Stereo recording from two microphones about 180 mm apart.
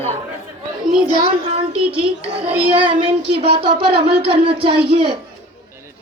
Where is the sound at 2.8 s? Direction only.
30° right (ahead or behind).